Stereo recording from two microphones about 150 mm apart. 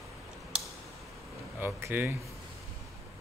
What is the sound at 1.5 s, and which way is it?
Speech, 15° right (ahead or behind).